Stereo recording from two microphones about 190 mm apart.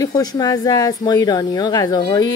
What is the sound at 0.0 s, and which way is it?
Speech, 20° left (ahead or behind).